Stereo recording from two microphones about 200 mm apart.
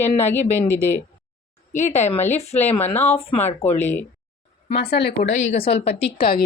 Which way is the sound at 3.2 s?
10° left (ahead or behind).